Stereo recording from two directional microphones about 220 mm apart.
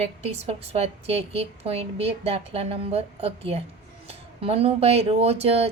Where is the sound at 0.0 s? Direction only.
25° right (ahead or behind).